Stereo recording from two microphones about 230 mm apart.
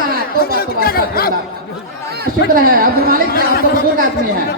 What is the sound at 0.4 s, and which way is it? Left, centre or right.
Speech, left.